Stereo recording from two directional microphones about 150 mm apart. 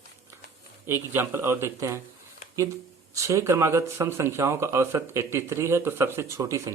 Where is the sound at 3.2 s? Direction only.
20° right (ahead or behind).